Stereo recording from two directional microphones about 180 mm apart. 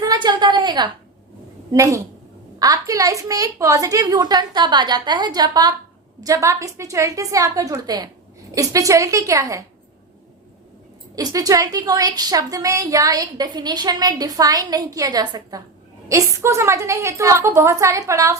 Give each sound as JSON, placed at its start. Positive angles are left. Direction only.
{"t": 0.0, "sound": "a woman's voice", "side_deg": -25}
{"t": 11.1, "sound": "a woman's voice", "side_deg": -20}